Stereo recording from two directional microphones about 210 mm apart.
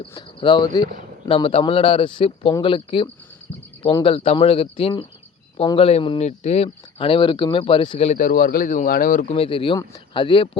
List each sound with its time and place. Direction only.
0.1 s speech: 20° left (ahead or behind)